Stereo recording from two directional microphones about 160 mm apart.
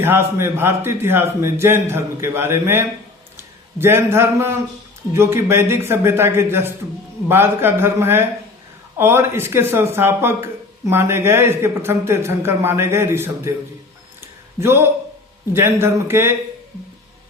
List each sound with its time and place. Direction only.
0.0 s a man's voice: 15° right (ahead or behind)
14.2 s a sound: 15° right (ahead or behind)
15.5 s speech: 15° right (ahead or behind)